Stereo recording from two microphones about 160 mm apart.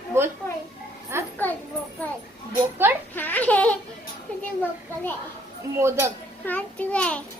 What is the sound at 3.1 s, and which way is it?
Speech, 10° left (ahead or behind).